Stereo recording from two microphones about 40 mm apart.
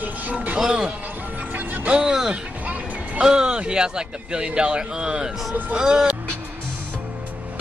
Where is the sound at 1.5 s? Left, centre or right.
Right.